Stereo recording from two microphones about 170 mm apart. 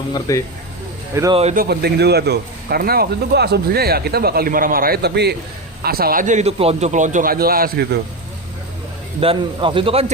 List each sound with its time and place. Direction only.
0.1 s speech: 20° left (ahead or behind)
1.1 s speech: 20° right (ahead or behind)
1.5 s a man's voice: 70° right (ahead or behind)
5.8 s a man's voice: 60° right (ahead or behind)
9.2 s speech: 30° right (ahead or behind)